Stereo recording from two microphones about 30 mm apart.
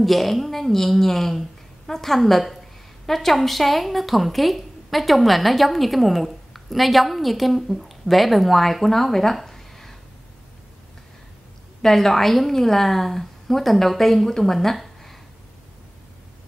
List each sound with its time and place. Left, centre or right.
0.0 s a woman's voice: centre
9.5 s a sound: centre
11.8 s a woman's voice: centre